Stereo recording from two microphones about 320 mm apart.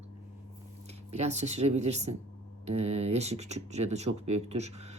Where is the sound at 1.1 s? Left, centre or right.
Right.